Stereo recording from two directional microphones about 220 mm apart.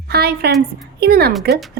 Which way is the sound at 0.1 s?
45° right (ahead or behind).